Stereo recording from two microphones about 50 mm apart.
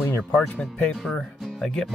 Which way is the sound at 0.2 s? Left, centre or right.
Centre.